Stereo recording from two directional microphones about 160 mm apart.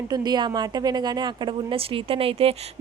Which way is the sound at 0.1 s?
25° right (ahead or behind).